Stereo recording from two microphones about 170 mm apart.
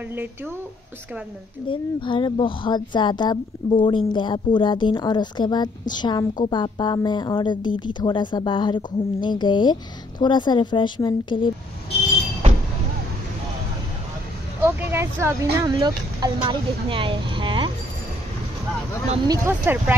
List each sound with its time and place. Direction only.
0.1 s speech: 10° right (ahead or behind)
1.7 s speech: 30° left (ahead or behind)
14.6 s speech: 15° right (ahead or behind)
15.6 s speech: 25° right (ahead or behind)
19.2 s speech: 20° right (ahead or behind)